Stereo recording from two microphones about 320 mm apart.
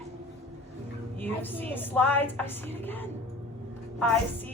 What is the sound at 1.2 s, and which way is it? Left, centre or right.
A woman's voice, centre.